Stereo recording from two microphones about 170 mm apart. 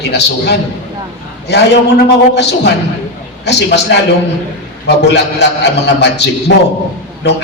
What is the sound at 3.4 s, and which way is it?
A man's voice, 85° left.